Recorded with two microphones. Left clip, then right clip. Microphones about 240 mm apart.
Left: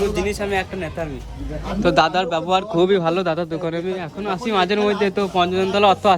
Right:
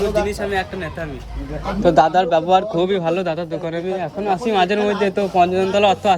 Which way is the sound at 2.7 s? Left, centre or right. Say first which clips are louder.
Left 1 dB; centre.